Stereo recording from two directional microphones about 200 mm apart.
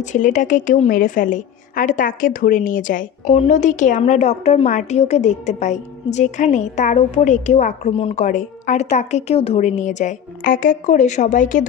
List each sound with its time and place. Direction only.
0.0 s a woman's voice: 40° left (ahead or behind)